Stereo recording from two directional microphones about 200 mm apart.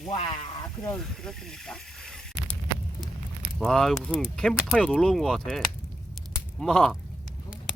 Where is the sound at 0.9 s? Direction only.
5° left (ahead or behind).